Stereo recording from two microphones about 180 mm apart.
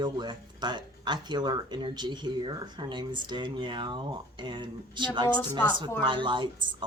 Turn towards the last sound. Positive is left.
turn(degrees=-25)  # may be behind; listen again after turning